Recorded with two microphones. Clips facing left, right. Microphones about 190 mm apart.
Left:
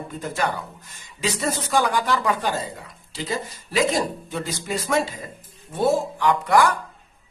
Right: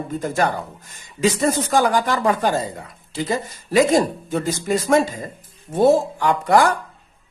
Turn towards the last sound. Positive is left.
turn(degrees=-45)  # may be behind; listen again after turning